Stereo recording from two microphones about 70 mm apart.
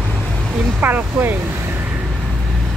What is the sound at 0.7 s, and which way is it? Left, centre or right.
Speech, right.